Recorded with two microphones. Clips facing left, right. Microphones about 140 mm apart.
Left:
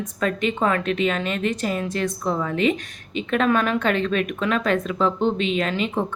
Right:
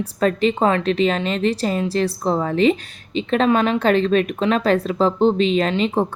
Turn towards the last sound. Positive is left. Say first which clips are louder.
# right 5 dB
turn(degrees=-30)  # may be behind; listen again after turning